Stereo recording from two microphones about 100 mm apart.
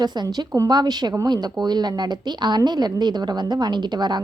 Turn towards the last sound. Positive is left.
turn(degrees=-45)  # may be behind; listen again after turning